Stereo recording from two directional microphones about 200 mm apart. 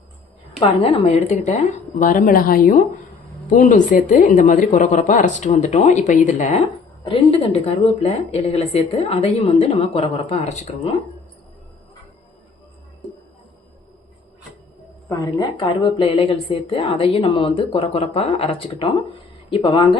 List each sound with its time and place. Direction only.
0.6 s speech: 25° left (ahead or behind)
15.1 s a woman's voice: 20° left (ahead or behind)